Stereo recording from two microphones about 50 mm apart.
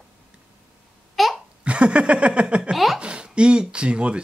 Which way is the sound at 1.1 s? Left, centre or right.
Centre.